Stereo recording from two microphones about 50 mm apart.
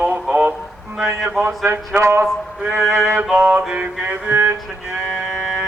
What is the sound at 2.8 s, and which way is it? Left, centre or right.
Music, right.